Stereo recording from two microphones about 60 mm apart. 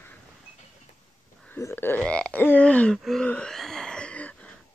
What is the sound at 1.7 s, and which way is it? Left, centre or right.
Speech, left.